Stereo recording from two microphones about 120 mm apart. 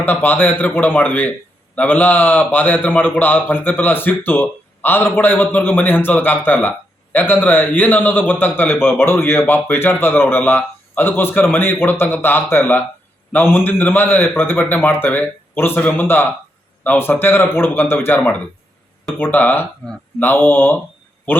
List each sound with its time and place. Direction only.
0.0 s a man's voice: 15° left (ahead or behind)